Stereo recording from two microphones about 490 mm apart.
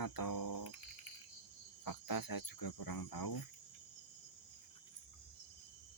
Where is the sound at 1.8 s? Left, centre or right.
Left.